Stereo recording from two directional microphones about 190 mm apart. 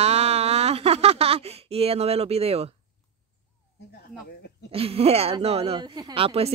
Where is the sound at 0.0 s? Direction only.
35° right (ahead or behind).